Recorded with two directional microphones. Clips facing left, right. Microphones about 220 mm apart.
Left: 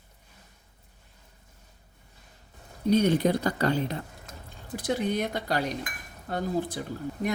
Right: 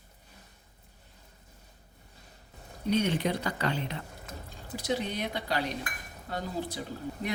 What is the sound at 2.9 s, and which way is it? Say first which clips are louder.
Speech: left 5 dB; 40° left (ahead or behind).